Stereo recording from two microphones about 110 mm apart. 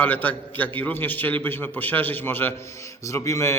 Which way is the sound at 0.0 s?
15° left (ahead or behind).